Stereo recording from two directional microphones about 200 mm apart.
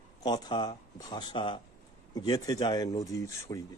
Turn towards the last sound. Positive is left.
turn(degrees=15)  # may be behind; listen again after turning